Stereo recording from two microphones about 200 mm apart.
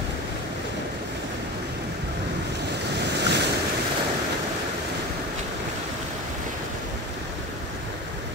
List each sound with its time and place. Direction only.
3.2 s waves: 60° right (ahead or behind)